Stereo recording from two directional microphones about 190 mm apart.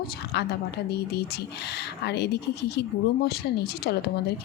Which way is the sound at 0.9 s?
60° left (ahead or behind).